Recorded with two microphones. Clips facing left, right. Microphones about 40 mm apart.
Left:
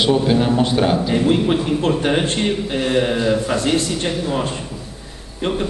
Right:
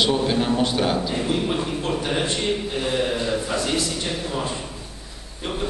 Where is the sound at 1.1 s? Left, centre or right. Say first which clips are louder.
Left 7 dB; left.